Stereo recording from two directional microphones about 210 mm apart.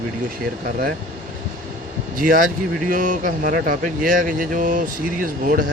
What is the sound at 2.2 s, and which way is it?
Speech, 40° right (ahead or behind).